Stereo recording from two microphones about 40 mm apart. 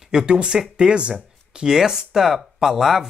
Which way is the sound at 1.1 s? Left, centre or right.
Centre.